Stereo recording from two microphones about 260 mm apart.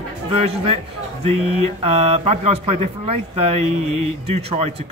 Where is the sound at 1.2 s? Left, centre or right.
Right.